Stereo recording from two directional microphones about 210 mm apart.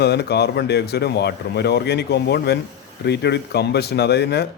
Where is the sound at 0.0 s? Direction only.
50° left (ahead or behind).